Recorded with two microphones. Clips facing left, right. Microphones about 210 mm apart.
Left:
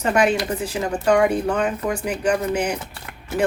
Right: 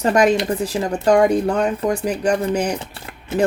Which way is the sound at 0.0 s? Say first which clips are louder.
Right 3 dB; 40° right (ahead or behind).